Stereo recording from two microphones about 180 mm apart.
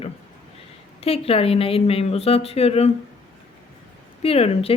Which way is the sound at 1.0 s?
30° left (ahead or behind).